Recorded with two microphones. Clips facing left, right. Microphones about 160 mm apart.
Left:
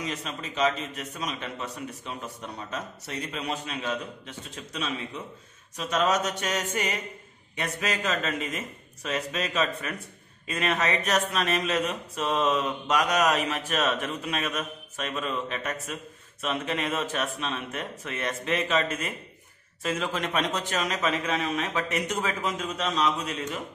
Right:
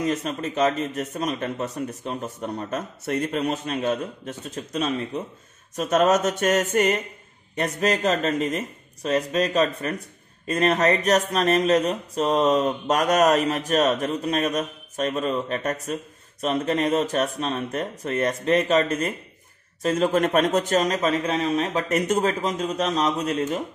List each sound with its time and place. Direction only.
0.0 s a man's voice: 50° right (ahead or behind)
7.5 s mantra: 45° right (ahead or behind)
10.4 s a man's voice: 45° right (ahead or behind)
11.1 s mantra: 45° right (ahead or behind)